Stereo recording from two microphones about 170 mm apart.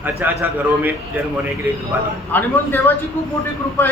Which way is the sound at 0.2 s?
10° right (ahead or behind).